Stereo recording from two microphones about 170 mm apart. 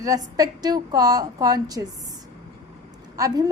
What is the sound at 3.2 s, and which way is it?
Speech, 20° right (ahead or behind).